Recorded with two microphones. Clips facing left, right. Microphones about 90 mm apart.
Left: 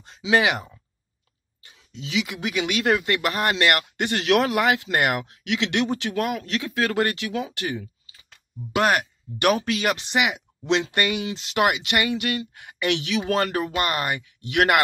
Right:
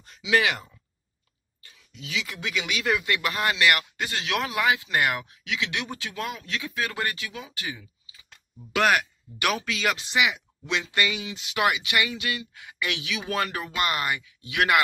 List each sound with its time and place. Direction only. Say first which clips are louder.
0.0 s speech: left 3 dB; 30° left (ahead or behind)
1.6 s a sound: left 5 dB; 25° left (ahead or behind)
2.5 s speech: left 5 dB; 50° left (ahead or behind)
8.7 s speech: left 1 dB; 40° left (ahead or behind)
10.6 s speech: left 7 dB; 30° left (ahead or behind)
10.9 s speech: left 3 dB; 50° left (ahead or behind)